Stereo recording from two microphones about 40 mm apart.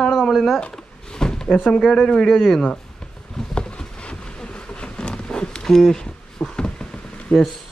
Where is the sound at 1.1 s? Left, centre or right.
Centre.